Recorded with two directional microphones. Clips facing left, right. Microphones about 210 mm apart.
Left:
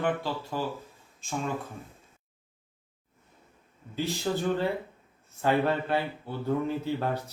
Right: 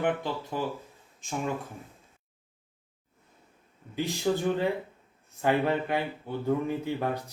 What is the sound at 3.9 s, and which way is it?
Speech, 15° right (ahead or behind).